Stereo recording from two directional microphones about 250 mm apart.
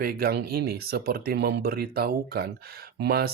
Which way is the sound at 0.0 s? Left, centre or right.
Right.